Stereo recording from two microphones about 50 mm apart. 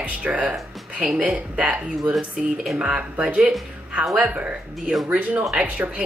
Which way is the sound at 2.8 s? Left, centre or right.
Right.